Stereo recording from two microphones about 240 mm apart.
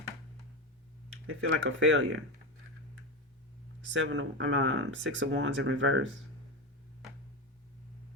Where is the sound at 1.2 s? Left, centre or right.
Right.